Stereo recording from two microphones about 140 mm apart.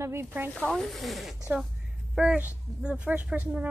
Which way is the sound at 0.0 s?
15° right (ahead or behind).